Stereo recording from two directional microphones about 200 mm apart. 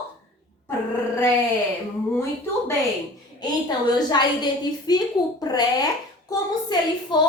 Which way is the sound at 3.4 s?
20° left (ahead or behind).